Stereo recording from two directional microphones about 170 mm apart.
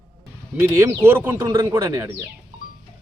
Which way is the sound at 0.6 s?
15° right (ahead or behind).